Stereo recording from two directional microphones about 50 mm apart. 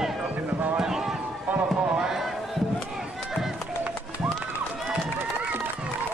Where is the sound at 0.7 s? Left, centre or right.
Centre.